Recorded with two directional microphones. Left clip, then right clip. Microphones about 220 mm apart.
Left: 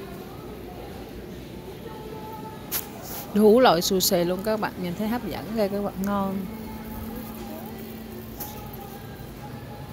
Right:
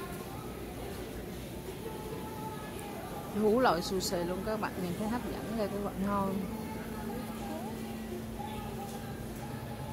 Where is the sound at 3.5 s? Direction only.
20° left (ahead or behind).